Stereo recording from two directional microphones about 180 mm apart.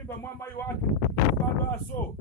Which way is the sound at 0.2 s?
15° left (ahead or behind).